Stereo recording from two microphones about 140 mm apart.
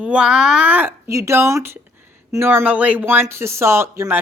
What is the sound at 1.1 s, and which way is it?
A woman's voice, 20° right (ahead or behind).